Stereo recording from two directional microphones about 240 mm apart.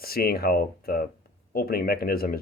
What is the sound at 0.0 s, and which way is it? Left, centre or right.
Speech, left.